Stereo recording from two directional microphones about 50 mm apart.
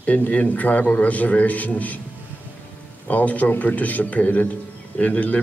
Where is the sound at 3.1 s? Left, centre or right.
Left.